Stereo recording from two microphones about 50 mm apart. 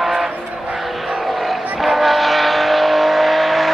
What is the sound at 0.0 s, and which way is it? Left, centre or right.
Vehicle, centre.